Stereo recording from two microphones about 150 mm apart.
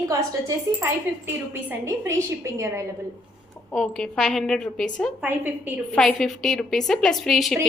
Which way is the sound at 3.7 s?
5° left (ahead or behind).